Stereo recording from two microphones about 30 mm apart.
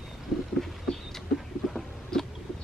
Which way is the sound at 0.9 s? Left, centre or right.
Left.